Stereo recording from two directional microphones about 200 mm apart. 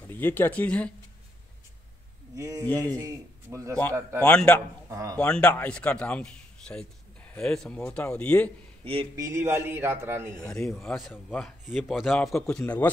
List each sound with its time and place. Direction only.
0.0 s speech: 10° left (ahead or behind)
2.3 s a man's voice: 15° right (ahead or behind)
4.2 s speech: 5° left (ahead or behind)
4.8 s speech: 15° right (ahead or behind)
5.2 s speech: 5° left (ahead or behind)
9.1 s speech: 15° right (ahead or behind)
10.4 s speech: 5° left (ahead or behind)